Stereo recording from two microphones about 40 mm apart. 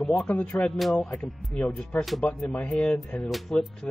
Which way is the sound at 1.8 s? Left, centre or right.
Left.